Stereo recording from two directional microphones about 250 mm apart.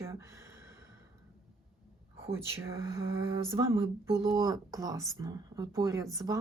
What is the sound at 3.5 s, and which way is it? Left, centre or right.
Speech, centre.